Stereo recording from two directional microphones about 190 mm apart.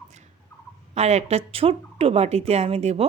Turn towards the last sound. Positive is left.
turn(degrees=-35)  # may be behind; listen again after turning